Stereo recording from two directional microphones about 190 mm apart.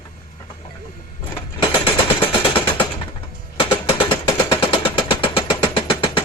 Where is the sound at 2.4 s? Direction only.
25° left (ahead or behind).